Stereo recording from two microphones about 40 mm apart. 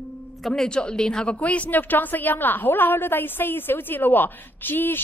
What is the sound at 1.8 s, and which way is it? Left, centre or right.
A woman's voice, left.